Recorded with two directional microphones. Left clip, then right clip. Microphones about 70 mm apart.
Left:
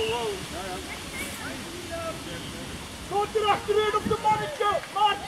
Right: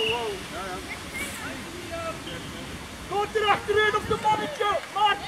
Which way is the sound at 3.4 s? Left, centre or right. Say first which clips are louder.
Right 3 dB; centre.